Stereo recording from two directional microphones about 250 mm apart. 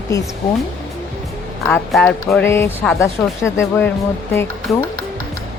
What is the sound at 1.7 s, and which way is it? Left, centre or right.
Speech, centre.